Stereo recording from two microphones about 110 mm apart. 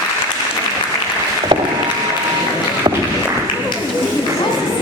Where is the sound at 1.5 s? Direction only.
45° right (ahead or behind).